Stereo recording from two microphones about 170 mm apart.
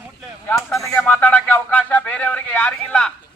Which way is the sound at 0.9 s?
15° left (ahead or behind).